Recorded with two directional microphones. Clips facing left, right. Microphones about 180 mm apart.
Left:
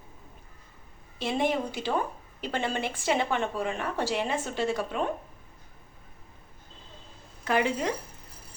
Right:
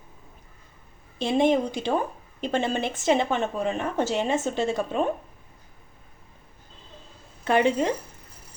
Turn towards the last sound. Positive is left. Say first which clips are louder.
# right 5 dB
turn(degrees=-25)  # may be behind; listen again after turning